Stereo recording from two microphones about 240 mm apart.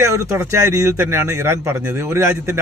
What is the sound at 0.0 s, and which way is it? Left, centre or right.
A man's voice, centre.